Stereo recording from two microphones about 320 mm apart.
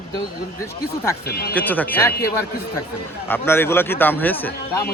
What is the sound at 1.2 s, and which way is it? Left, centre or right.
Speech, left.